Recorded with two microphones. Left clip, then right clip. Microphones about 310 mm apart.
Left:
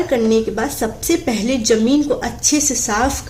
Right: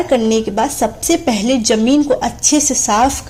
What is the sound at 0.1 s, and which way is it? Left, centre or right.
A woman's voice, right.